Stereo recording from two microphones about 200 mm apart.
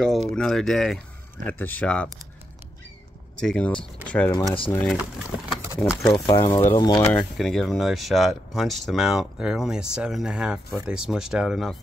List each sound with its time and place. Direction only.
0.4 s speech: centre (ahead or behind)
3.4 s speech: 5° left (ahead or behind)
6.2 s speech: 15° left (ahead or behind)
7.1 s speech: 5° left (ahead or behind)